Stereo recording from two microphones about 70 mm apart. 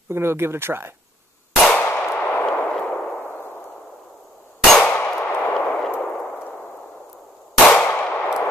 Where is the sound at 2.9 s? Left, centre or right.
Left.